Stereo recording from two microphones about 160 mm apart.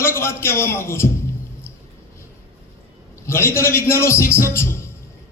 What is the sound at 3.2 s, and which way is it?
A man's voice, 15° left (ahead or behind).